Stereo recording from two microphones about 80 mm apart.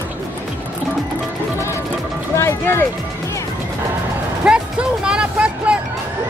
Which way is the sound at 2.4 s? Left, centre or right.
Left.